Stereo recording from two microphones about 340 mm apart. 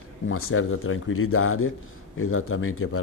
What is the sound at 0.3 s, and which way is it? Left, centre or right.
Speech, left.